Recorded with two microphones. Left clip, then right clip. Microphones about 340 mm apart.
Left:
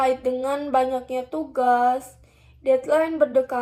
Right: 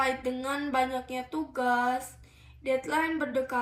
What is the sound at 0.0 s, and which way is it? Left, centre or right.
Speech, centre.